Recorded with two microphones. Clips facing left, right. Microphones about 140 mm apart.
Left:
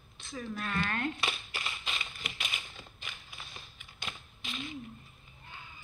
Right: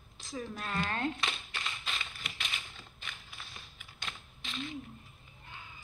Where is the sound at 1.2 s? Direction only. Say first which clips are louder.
Left 1 dB; 5° left (ahead or behind).